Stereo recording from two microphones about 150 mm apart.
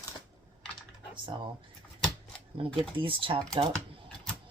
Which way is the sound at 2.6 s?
35° right (ahead or behind).